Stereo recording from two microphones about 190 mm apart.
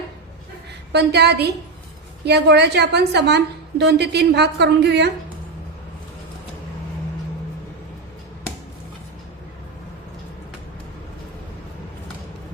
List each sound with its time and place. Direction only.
0.9 s a woman's voice: 60° right (ahead or behind)